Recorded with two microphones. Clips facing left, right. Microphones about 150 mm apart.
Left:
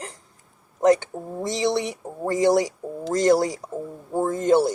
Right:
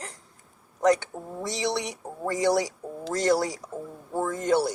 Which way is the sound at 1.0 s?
50° left (ahead or behind).